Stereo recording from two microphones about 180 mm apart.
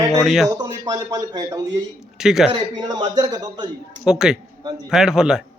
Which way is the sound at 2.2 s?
5° right (ahead or behind).